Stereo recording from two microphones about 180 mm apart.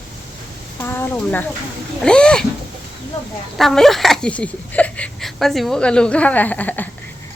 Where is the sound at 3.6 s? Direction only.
Centre (ahead or behind).